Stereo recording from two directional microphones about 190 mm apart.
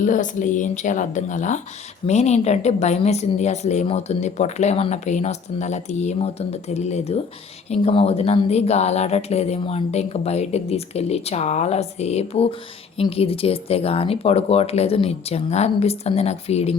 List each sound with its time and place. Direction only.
0.0 s speech: 40° left (ahead or behind)